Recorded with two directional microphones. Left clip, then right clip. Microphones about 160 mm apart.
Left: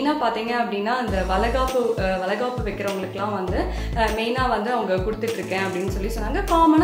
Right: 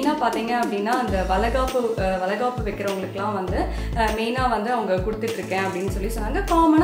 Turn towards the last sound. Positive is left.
turn(degrees=0)  # may be behind; listen again after turning